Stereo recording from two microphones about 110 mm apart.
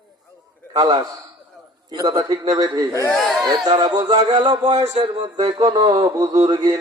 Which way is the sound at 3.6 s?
35° right (ahead or behind).